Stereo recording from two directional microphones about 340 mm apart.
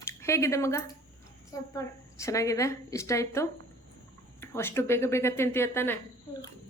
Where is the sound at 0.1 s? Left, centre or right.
Centre.